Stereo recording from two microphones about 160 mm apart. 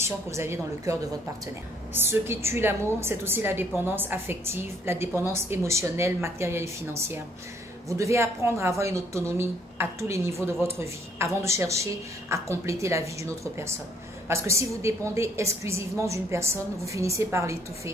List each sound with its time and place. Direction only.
0.0 s a woman's voice: 15° right (ahead or behind)
2.0 s a woman's voice: 15° right (ahead or behind)